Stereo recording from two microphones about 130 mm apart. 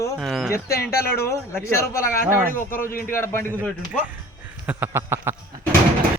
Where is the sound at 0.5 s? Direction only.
20° left (ahead or behind).